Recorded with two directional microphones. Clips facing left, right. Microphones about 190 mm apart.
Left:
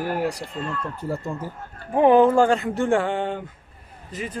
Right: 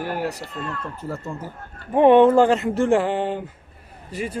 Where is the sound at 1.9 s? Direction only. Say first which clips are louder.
Right 2 dB; centre (ahead or behind).